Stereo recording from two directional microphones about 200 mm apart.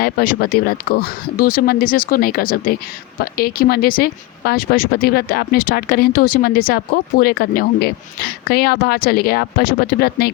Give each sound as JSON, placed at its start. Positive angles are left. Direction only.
{"t": 0.0, "sound": "speech", "side_deg": 50}